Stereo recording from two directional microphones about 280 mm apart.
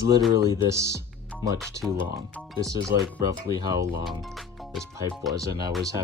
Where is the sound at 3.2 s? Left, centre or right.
Centre.